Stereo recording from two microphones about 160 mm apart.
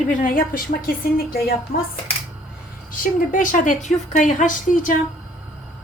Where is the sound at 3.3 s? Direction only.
55° left (ahead or behind).